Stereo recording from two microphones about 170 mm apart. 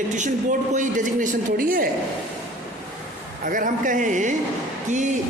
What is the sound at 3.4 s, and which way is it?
Speech, 50° right (ahead or behind).